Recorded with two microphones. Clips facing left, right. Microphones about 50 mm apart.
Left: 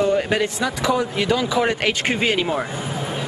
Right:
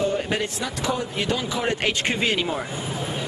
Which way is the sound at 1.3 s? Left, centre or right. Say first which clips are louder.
Left 6 dB; left.